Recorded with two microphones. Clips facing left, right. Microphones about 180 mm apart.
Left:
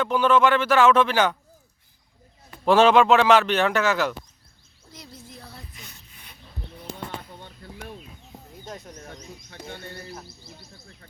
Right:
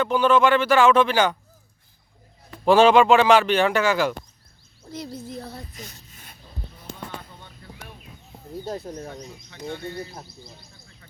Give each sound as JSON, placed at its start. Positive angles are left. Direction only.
{"t": 0.0, "sound": "a man's voice", "side_deg": -5}
{"t": 2.6, "sound": "a man's voice", "side_deg": 0}
{"t": 4.9, "sound": "a sound", "side_deg": -45}
{"t": 8.6, "sound": "speech", "side_deg": -35}